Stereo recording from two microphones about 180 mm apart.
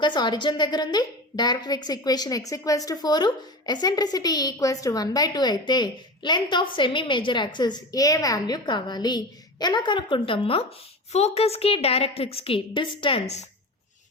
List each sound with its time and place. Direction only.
0.0 s a woman's voice: 25° left (ahead or behind)